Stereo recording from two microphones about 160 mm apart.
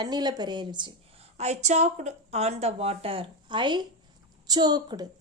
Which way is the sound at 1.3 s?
45° right (ahead or behind).